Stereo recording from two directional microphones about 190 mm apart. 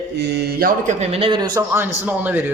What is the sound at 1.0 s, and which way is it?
Speech, 30° right (ahead or behind).